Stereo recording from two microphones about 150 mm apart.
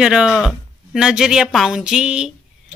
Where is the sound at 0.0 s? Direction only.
5° right (ahead or behind).